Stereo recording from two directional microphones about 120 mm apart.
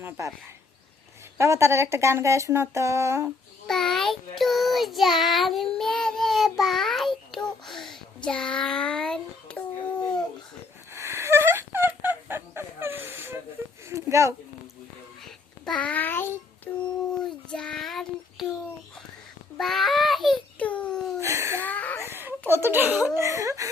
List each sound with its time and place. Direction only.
0.0 s speech: 20° right (ahead or behind)
1.4 s speech: 25° right (ahead or behind)
3.7 s child singing: 5° left (ahead or behind)
10.9 s fowl: 25° right (ahead or behind)
13.9 s speech: 25° right (ahead or behind)
15.2 s a sound: 5° left (ahead or behind)
16.7 s a child's voice: 15° left (ahead or behind)
17.1 s child singing: 5° left (ahead or behind)
19.5 s child singing: centre (ahead or behind)
20.6 s a child's voice: 10° left (ahead or behind)
21.2 s speech: 25° right (ahead or behind)
21.6 s a sound: 15° left (ahead or behind)
22.0 s speech: 20° right (ahead or behind)